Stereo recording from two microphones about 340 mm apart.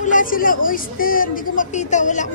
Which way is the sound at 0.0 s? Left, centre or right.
Left.